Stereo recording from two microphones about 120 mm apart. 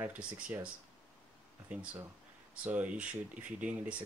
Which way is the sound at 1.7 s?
10° right (ahead or behind).